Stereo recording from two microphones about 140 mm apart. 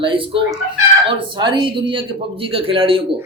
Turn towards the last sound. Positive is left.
turn(degrees=-40)  # may be behind; listen again after turning